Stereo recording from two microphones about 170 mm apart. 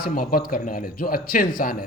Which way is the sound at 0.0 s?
60° left (ahead or behind).